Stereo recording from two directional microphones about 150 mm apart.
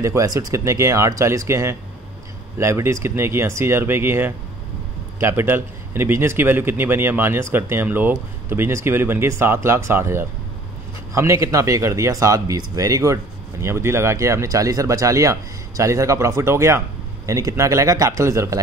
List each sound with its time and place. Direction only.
0.0 s a man's voice: 20° right (ahead or behind)